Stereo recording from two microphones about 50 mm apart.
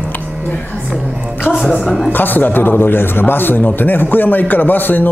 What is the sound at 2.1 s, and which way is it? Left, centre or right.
A man's voice, left.